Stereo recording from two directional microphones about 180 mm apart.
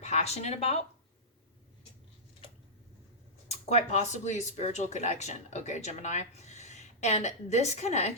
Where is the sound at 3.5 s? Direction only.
35° left (ahead or behind).